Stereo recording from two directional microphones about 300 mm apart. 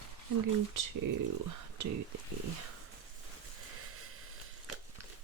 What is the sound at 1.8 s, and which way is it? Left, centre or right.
Speech, right.